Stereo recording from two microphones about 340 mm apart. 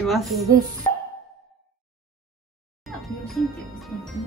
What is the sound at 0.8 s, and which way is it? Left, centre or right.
Music, centre.